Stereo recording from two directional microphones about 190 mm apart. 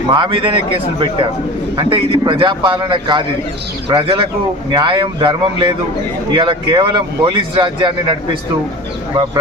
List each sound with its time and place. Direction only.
0.1 s speech: 25° right (ahead or behind)